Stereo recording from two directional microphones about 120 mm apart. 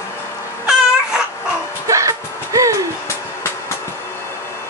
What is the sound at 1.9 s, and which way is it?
Music, 25° right (ahead or behind).